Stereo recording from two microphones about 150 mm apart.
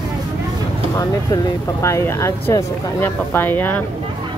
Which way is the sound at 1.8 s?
20° left (ahead or behind).